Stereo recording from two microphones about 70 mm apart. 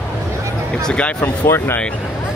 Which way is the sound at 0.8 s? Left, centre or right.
Centre.